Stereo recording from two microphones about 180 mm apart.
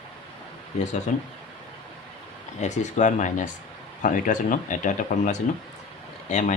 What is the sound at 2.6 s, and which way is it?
Speech, 40° left (ahead or behind).